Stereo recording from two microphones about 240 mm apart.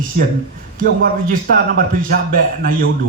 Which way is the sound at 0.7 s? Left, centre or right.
Right.